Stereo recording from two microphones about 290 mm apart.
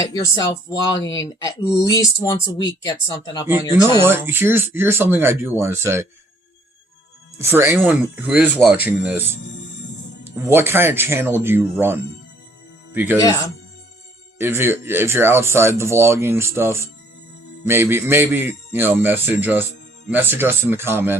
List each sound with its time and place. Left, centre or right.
0.0 s speech: centre
4.0 s speech: centre
7.3 s speech: centre
10.2 s speech: centre
13.1 s speech: centre
14.3 s speech: centre